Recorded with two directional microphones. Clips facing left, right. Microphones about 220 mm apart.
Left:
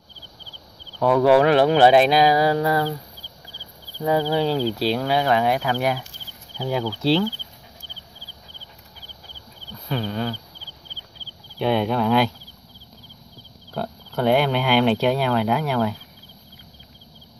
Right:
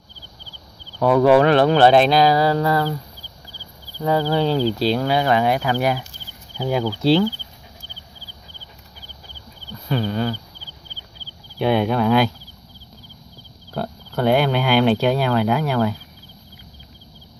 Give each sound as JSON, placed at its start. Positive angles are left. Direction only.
{"t": 1.0, "sound": "speech", "side_deg": 0}
{"t": 4.0, "sound": "speech", "side_deg": 15}
{"t": 6.6, "sound": "speech", "side_deg": -15}
{"t": 9.8, "sound": "speech", "side_deg": 0}
{"t": 11.5, "sound": "speech", "side_deg": -10}
{"t": 13.7, "sound": "speech", "side_deg": 0}